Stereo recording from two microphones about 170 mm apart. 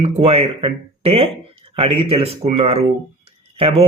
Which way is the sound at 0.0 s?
35° right (ahead or behind).